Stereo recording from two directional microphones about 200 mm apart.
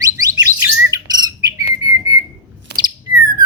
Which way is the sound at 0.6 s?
20° right (ahead or behind).